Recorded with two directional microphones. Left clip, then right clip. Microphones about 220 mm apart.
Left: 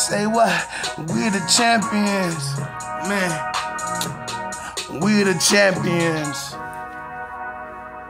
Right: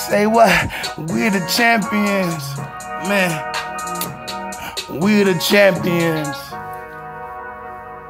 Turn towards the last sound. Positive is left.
turn(degrees=-20)  # may be behind; listen again after turning